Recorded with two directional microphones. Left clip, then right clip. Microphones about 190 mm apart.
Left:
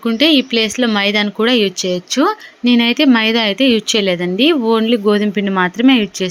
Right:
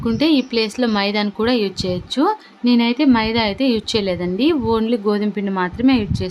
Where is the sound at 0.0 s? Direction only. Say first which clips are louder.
Left 5 dB; 5° left (ahead or behind).